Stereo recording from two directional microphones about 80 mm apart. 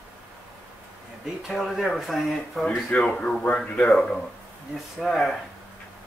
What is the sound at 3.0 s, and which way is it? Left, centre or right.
Speech, centre.